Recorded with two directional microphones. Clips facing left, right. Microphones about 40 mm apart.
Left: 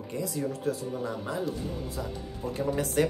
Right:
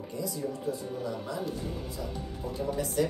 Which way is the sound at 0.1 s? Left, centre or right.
Left.